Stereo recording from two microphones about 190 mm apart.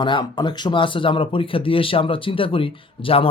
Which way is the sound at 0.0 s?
25° left (ahead or behind).